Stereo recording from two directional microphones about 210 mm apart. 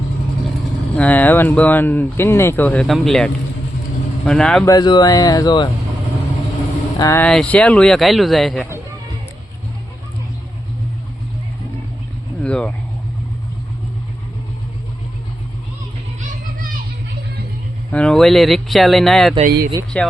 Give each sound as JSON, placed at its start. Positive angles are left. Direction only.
{"t": 0.9, "sound": "speech", "side_deg": 5}
{"t": 4.6, "sound": "speech", "side_deg": 20}
{"t": 7.0, "sound": "speech", "side_deg": 15}
{"t": 12.4, "sound": "speech", "side_deg": 5}
{"t": 16.2, "sound": "music", "side_deg": -45}
{"t": 17.9, "sound": "speech", "side_deg": 5}
{"t": 19.4, "sound": "speech", "side_deg": -45}
{"t": 19.9, "sound": "speech", "side_deg": 5}